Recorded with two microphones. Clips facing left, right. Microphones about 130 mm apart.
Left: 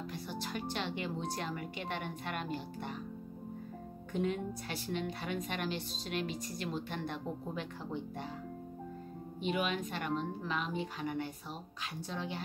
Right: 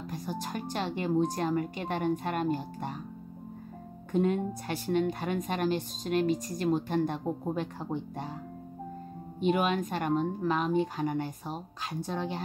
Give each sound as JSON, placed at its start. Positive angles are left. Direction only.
{"t": 0.1, "sound": "a woman's voice", "side_deg": -45}
{"t": 4.1, "sound": "a woman's voice", "side_deg": -45}
{"t": 9.4, "sound": "a woman's voice", "side_deg": -45}